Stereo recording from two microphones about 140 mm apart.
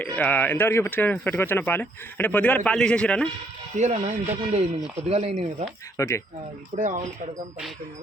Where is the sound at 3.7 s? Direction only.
55° right (ahead or behind).